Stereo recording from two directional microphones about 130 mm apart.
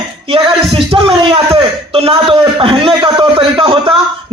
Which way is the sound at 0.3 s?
45° right (ahead or behind).